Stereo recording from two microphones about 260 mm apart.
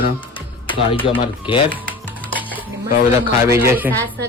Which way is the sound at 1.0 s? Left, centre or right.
Centre.